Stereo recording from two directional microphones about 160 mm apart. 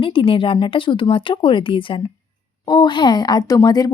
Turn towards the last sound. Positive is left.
turn(degrees=25)  # may be behind; listen again after turning